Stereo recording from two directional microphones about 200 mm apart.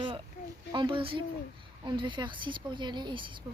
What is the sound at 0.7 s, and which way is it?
A woman's voice, 25° right (ahead or behind).